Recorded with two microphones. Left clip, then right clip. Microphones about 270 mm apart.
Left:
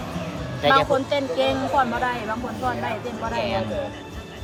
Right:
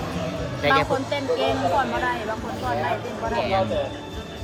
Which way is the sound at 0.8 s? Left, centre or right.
Left.